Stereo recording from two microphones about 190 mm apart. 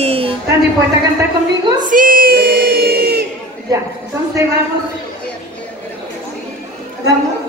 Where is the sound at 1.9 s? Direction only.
45° right (ahead or behind).